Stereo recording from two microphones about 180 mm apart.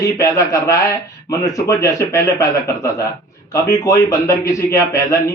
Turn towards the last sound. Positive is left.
turn(degrees=15)  # may be behind; listen again after turning